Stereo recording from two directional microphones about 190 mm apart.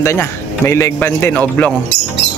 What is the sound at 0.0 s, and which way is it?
A man's voice, 15° left (ahead or behind).